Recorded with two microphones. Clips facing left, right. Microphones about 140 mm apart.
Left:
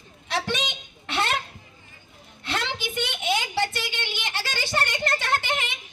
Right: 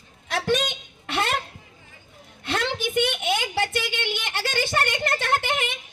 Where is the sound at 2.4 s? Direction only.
50° right (ahead or behind).